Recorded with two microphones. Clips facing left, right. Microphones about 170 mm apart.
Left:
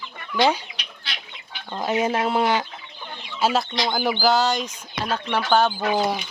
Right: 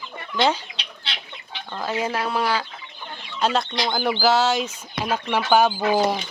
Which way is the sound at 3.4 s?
5° left (ahead or behind).